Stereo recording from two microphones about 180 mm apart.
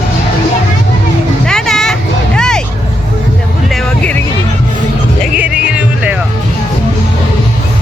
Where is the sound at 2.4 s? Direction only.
5° left (ahead or behind).